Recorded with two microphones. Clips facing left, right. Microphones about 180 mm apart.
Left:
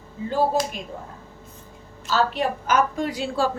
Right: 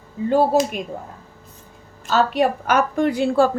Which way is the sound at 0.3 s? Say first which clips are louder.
Right 5 dB; 60° right (ahead or behind).